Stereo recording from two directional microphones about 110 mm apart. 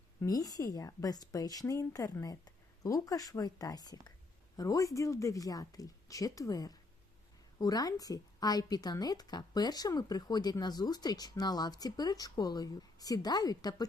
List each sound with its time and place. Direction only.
0.2 s a woman's voice: 35° left (ahead or behind)